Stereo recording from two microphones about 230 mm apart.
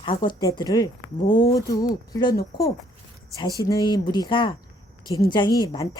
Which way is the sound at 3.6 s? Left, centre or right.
Centre.